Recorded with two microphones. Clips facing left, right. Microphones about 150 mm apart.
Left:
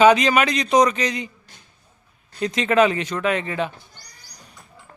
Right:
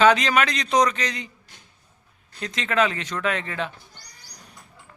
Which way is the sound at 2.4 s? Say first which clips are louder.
Left 6 dB; 15° left (ahead or behind).